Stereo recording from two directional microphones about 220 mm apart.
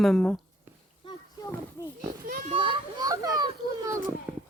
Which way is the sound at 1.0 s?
15° left (ahead or behind).